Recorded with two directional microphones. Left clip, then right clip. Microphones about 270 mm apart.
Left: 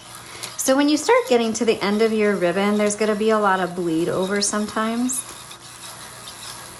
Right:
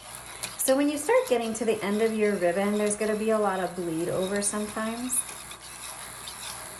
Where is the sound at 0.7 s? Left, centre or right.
Centre.